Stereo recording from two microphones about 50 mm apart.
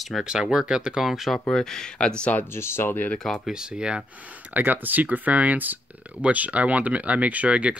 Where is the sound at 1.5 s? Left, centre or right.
Centre.